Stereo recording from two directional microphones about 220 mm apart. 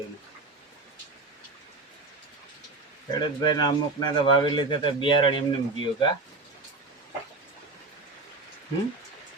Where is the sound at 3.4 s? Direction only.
20° left (ahead or behind).